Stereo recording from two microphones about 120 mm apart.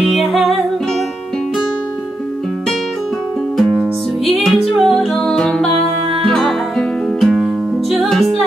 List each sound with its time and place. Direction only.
0.0 s music: centre (ahead or behind)
4.3 s music: centre (ahead or behind)
7.2 s music: centre (ahead or behind)